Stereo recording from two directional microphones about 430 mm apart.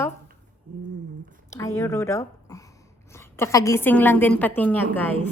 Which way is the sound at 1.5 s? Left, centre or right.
Centre.